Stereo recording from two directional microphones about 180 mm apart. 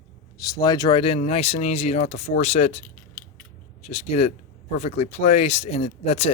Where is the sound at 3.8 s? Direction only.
35° left (ahead or behind).